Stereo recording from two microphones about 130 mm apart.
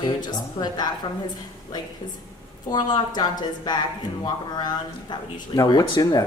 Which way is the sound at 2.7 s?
35° left (ahead or behind).